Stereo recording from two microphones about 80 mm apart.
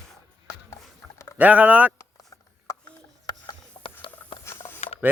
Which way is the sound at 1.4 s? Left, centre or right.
Centre.